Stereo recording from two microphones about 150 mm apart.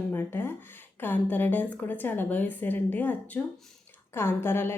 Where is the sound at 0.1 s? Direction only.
15° left (ahead or behind).